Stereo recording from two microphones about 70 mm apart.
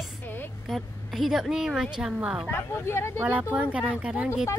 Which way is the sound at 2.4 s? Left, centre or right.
Left.